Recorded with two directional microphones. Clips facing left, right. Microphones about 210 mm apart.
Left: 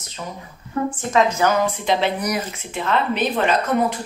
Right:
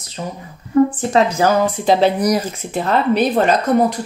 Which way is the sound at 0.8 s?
35° right (ahead or behind).